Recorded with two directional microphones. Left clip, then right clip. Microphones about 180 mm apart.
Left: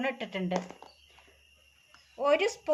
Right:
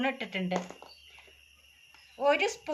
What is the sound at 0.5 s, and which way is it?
Speech, 20° right (ahead or behind).